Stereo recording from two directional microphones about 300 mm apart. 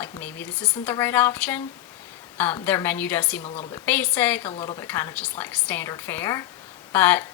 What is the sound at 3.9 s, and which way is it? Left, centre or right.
A woman's voice, centre.